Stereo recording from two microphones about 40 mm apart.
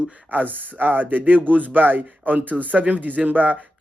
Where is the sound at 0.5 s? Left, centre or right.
Right.